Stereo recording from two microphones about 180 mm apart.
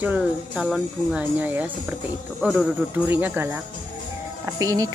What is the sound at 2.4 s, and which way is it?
Jingle bell, 5° left (ahead or behind).